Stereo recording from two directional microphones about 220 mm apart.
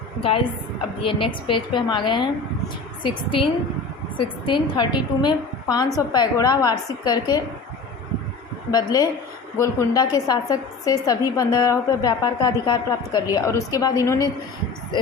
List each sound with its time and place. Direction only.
0.2 s a woman's voice: 25° left (ahead or behind)
8.7 s a woman's voice: 15° left (ahead or behind)